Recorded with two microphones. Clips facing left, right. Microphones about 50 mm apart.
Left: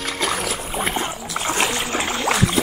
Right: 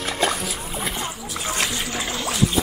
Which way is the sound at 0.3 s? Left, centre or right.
Left.